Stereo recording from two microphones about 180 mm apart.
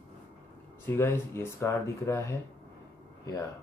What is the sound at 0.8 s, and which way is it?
Speech, 15° left (ahead or behind).